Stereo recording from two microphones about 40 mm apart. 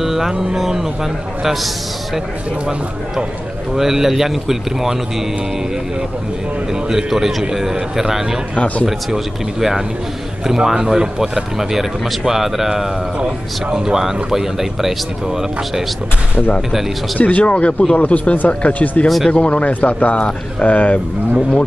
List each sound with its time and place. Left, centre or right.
0.0 s a man's voice: centre
3.7 s speech: centre
6.7 s speech: centre
8.5 s speech: left
8.8 s speech: centre
13.2 s speech: right
17.2 s speech: left
19.0 s speech: centre
19.3 s speech: left